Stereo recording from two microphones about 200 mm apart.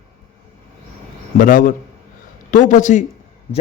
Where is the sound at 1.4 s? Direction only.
40° left (ahead or behind).